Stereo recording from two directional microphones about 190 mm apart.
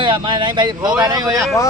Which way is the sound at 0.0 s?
25° right (ahead or behind).